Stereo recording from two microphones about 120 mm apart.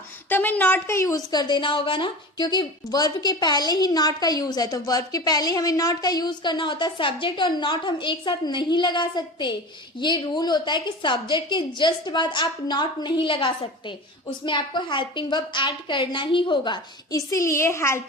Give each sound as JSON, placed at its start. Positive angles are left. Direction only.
{"t": 0.3, "sound": "a woman's voice", "side_deg": 15}
{"t": 17.2, "sound": "a woman's voice", "side_deg": 25}